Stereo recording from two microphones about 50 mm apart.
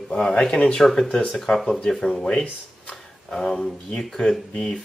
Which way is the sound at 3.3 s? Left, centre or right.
Centre.